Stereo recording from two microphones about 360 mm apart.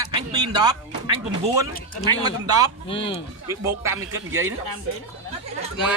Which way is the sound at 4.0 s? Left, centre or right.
Right.